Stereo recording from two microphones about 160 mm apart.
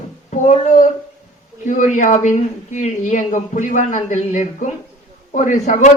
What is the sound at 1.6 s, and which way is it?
A man's voice, 50° left (ahead or behind).